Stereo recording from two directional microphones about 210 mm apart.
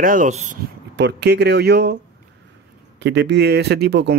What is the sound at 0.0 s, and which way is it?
Speech, 40° right (ahead or behind).